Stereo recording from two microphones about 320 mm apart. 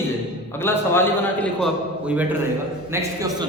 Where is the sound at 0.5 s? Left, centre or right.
Centre.